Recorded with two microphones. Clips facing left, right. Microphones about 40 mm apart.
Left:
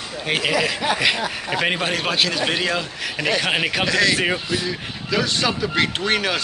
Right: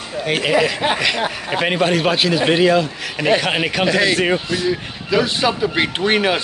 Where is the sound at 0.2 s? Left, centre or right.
Centre.